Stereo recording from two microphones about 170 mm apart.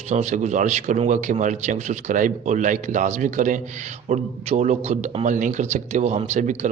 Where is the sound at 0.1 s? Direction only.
40° right (ahead or behind).